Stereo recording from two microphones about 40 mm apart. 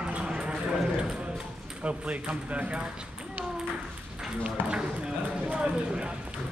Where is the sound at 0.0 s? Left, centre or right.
Right.